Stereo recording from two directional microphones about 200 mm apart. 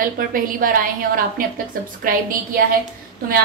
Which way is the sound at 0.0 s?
45° right (ahead or behind).